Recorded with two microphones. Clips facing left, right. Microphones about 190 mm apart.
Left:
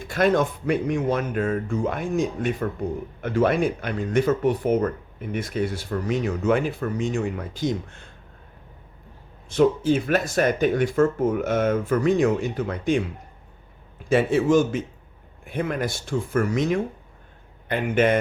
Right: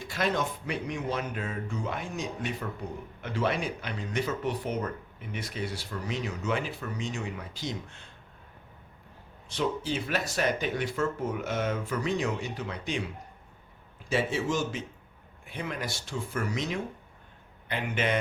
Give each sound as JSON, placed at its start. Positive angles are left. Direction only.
{"t": 0.0, "sound": "speech", "side_deg": 50}
{"t": 9.5, "sound": "speech", "side_deg": 50}
{"t": 14.1, "sound": "speech", "side_deg": 55}